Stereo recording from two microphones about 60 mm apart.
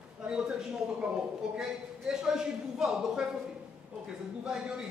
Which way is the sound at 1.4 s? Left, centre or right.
Centre.